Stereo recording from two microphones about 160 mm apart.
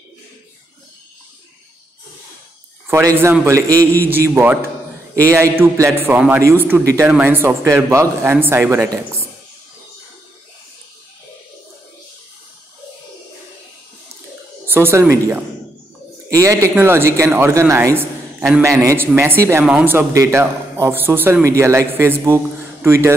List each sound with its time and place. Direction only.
2.9 s a man's voice: 15° right (ahead or behind)
14.7 s a man's voice: 15° right (ahead or behind)